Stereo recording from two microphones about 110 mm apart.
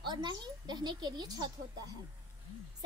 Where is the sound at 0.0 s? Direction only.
40° right (ahead or behind).